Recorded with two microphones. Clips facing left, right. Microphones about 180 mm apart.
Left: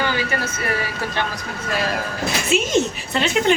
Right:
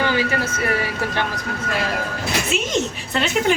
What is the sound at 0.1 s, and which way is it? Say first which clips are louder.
Speech: right 3 dB; 30° right (ahead or behind).